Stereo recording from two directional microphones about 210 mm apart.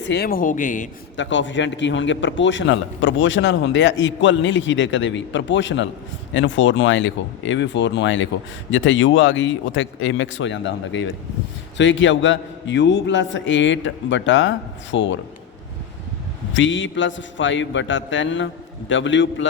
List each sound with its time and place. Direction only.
0.1 s speech: 45° left (ahead or behind)
1.1 s a man's voice: 60° left (ahead or behind)
16.6 s a man's voice: 60° left (ahead or behind)